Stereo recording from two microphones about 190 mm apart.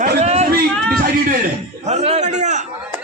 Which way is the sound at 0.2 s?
35° right (ahead or behind).